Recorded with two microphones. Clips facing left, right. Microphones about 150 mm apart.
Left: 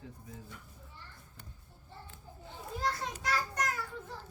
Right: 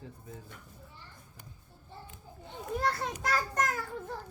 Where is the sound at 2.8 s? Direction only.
60° right (ahead or behind).